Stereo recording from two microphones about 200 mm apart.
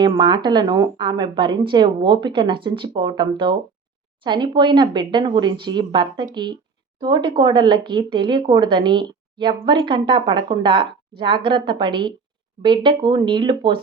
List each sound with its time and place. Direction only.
0.0 s speech: 20° right (ahead or behind)